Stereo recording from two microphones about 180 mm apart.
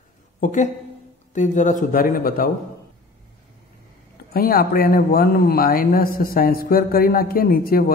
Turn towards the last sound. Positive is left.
turn(degrees=55)  # may be behind; listen again after turning